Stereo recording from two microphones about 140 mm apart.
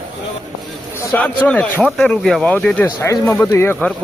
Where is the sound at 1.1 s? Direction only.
10° left (ahead or behind).